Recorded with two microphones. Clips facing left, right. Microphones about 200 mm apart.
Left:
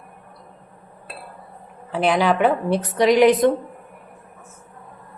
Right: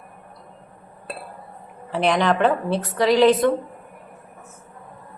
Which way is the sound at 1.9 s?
Centre (ahead or behind).